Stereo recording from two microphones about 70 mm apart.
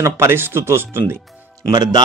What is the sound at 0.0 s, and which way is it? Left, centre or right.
Speech, right.